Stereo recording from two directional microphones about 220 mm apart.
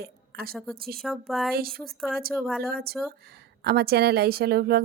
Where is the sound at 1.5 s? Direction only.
45° right (ahead or behind).